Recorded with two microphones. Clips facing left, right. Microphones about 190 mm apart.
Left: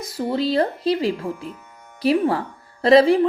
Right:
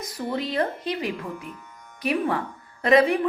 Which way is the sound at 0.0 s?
30° left (ahead or behind).